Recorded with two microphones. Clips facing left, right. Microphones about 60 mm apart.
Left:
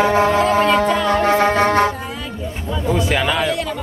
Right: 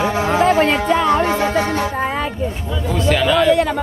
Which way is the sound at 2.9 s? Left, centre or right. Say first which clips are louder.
Right 2 dB; centre.